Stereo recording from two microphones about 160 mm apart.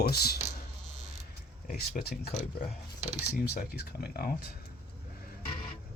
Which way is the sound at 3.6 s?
75° left (ahead or behind).